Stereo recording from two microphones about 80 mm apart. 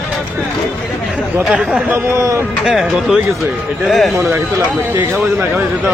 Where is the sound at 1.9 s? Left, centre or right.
Right.